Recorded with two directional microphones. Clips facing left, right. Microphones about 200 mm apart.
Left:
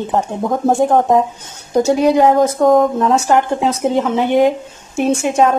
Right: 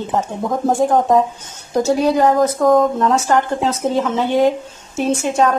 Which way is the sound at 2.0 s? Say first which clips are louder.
Left 3 dB; 20° left (ahead or behind).